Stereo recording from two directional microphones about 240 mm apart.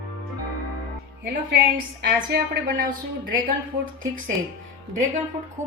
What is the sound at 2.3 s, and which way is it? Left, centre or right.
Speech, right.